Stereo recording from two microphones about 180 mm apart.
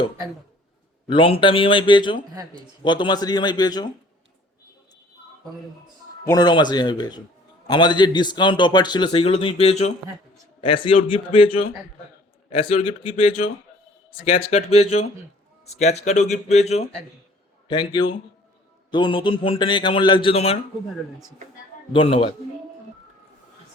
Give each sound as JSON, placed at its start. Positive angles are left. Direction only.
{"t": 1.1, "sound": "a man's voice", "side_deg": 30}
{"t": 2.3, "sound": "speech", "side_deg": -20}
{"t": 2.6, "sound": "a man's voice", "side_deg": 25}
{"t": 6.2, "sound": "a man's voice", "side_deg": 20}
{"t": 17.7, "sound": "a man's voice", "side_deg": 25}
{"t": 21.9, "sound": "speech", "side_deg": 35}